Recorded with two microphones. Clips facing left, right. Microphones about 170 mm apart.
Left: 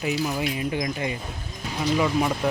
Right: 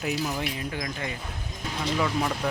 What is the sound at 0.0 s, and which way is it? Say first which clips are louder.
Speech: left 3 dB; 5° left (ahead or behind).